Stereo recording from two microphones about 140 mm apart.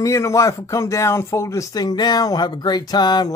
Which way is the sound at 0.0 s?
20° left (ahead or behind).